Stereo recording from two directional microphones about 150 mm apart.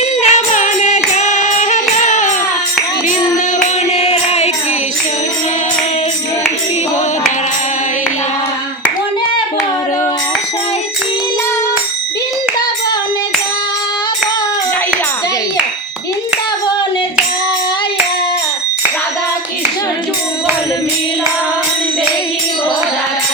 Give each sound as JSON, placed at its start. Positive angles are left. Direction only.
{"t": 0.2, "sound": "music", "side_deg": 50}
{"t": 3.9, "sound": "music", "side_deg": 45}